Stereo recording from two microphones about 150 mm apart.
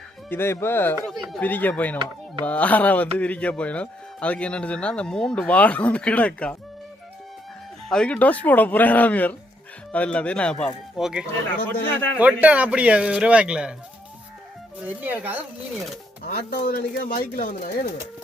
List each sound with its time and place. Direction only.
0.3 s speech: 15° left (ahead or behind)
1.0 s speech: centre (ahead or behind)
7.9 s speech: 5° left (ahead or behind)
10.9 s speech: 5° right (ahead or behind)
11.9 s speech: 10° left (ahead or behind)
12.1 s a man's voice: 10° right (ahead or behind)
14.8 s a man's voice: 10° right (ahead or behind)
16.2 s speech: 85° left; by 17.5 s 70° left (ahead or behind)